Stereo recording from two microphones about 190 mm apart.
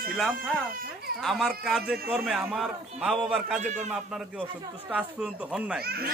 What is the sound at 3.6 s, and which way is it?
Speech, 40° right (ahead or behind).